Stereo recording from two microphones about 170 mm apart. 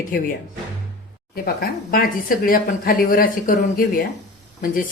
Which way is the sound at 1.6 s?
60° left (ahead or behind).